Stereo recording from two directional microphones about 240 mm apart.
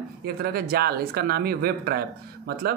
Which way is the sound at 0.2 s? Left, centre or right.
Right.